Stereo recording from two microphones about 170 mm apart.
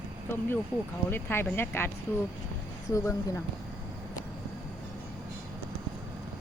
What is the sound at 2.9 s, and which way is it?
Speech, 20° left (ahead or behind).